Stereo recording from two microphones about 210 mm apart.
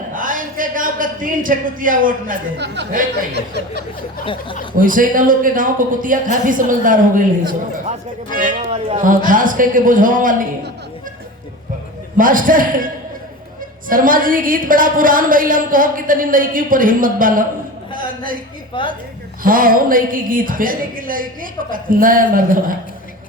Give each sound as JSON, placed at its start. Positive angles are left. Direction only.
{"t": 0.1, "sound": "a man's voice", "side_deg": -40}
{"t": 4.8, "sound": "a woman's voice", "side_deg": -40}
{"t": 12.1, "sound": "a woman's voice", "side_deg": -40}
{"t": 18.7, "sound": "a woman's voice", "side_deg": 25}
{"t": 19.4, "sound": "a woman's voice", "side_deg": -40}